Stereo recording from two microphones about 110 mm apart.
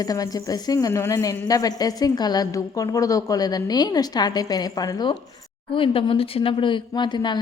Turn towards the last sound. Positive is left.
turn(degrees=45)  # may be behind; listen again after turning